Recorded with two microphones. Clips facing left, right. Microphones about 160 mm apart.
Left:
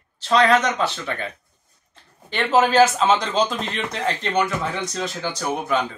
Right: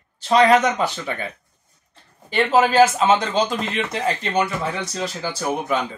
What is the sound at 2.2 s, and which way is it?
Speech, 10° right (ahead or behind).